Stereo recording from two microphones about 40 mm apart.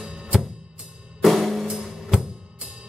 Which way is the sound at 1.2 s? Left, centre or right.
Centre.